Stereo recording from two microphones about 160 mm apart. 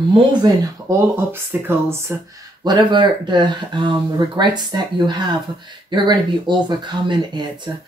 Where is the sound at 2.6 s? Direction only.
25° right (ahead or behind).